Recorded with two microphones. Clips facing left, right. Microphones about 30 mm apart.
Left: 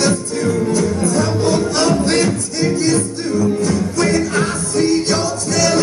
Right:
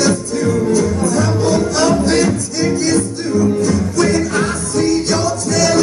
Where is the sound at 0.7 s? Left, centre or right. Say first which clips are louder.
Right 2 dB; left.